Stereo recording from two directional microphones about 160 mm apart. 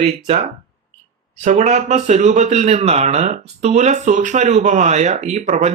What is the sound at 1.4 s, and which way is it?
Speech, 45° right (ahead or behind).